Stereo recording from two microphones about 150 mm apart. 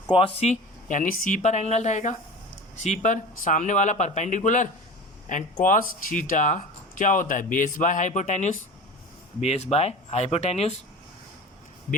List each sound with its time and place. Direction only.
0.1 s speech: 35° left (ahead or behind)